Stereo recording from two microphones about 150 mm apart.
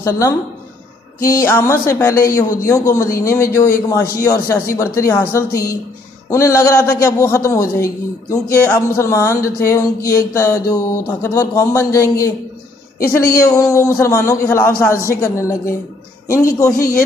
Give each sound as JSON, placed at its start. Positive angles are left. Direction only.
{"t": 0.0, "sound": "a man's voice", "side_deg": 20}